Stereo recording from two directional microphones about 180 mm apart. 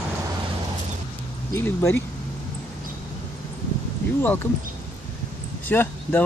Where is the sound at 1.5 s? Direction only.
15° left (ahead or behind).